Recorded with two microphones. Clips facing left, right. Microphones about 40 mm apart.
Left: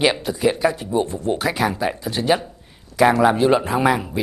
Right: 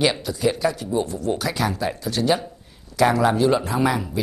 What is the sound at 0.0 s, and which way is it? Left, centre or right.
A man's voice, left.